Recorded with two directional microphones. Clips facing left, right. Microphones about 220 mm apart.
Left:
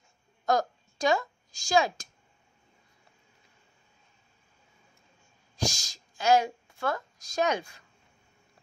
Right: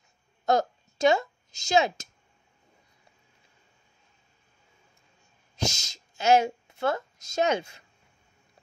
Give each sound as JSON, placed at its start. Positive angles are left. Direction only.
{"t": 0.5, "sound": "a woman's voice", "side_deg": -25}
{"t": 5.6, "sound": "a woman's voice", "side_deg": -25}